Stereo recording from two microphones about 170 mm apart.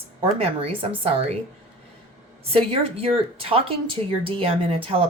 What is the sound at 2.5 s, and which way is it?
Speech, 35° right (ahead or behind).